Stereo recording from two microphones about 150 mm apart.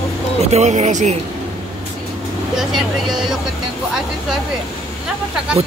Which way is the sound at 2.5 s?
5° right (ahead or behind).